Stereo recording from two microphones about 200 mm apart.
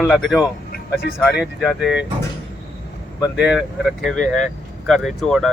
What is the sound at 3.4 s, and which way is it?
Speech, 5° right (ahead or behind).